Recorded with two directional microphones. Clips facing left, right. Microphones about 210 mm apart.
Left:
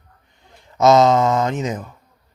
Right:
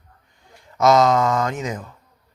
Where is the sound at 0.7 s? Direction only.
25° left (ahead or behind).